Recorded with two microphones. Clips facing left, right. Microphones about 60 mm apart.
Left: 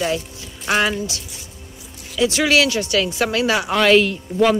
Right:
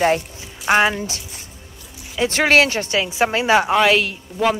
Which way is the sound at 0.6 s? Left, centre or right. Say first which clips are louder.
Right 3 dB; right.